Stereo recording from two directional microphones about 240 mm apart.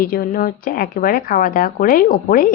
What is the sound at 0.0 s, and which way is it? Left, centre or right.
A woman's voice, left.